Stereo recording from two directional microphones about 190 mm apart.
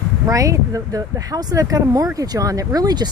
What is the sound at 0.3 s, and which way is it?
Speech, 15° right (ahead or behind).